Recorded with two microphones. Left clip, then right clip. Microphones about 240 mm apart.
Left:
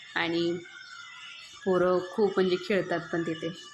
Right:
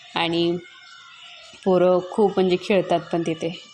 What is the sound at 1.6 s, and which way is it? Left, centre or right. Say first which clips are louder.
A woman's voice: right 7 dB; centre.